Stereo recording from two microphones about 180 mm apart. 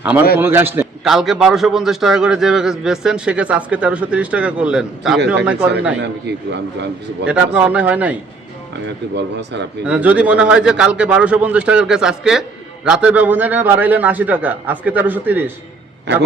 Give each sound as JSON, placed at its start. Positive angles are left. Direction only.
{"t": 0.0, "sound": "a man's voice", "side_deg": -10}
{"t": 1.0, "sound": "a man's voice", "side_deg": 0}
{"t": 6.0, "sound": "a man's voice", "side_deg": -75}
{"t": 7.3, "sound": "a man's voice", "side_deg": -5}
{"t": 9.1, "sound": "a man's voice", "side_deg": -75}
{"t": 9.8, "sound": "a man's voice", "side_deg": -5}
{"t": 16.1, "sound": "a man's voice", "side_deg": -75}